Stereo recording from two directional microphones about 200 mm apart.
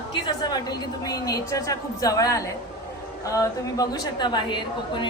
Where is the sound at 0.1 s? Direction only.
20° left (ahead or behind).